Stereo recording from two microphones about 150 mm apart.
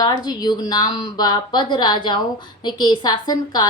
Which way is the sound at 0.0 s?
25° left (ahead or behind).